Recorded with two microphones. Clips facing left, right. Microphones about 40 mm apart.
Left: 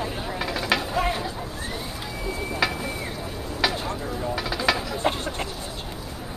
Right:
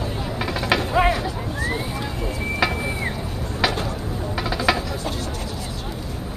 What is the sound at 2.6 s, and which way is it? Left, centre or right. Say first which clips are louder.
Vehicle: right 3 dB; centre.